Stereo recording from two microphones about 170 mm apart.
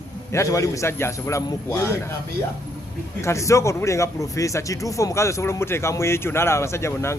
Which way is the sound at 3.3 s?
15° left (ahead or behind).